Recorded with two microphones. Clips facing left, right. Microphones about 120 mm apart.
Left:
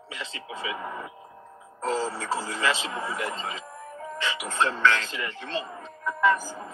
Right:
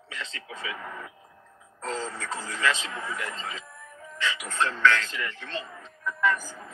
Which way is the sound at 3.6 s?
40° left (ahead or behind).